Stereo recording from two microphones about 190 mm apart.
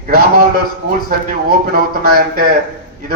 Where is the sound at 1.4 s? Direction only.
50° right (ahead or behind).